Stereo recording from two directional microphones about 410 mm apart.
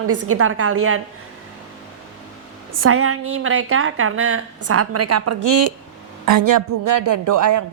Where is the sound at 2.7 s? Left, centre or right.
Right.